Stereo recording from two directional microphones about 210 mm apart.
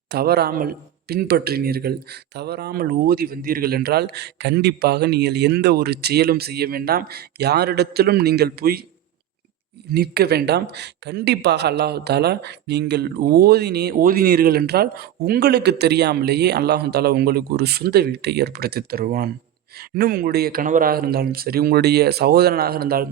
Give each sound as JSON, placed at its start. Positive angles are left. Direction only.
{"t": 0.1, "sound": "speech", "side_deg": -50}
{"t": 9.9, "sound": "speech", "side_deg": -50}